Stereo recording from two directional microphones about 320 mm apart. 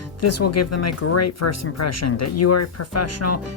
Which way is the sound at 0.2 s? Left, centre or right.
Left.